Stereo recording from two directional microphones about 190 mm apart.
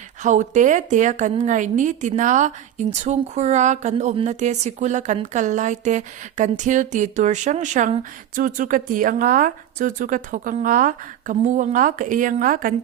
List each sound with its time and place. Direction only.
0.2 s a woman's voice: 40° right (ahead or behind)